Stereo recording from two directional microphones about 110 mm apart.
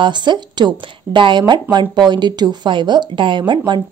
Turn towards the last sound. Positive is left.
turn(degrees=-45)  # may be behind; listen again after turning